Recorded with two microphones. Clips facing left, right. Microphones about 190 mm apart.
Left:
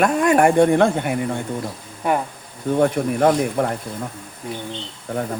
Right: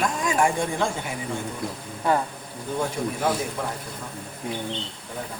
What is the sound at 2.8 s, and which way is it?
Speech, 65° left (ahead or behind).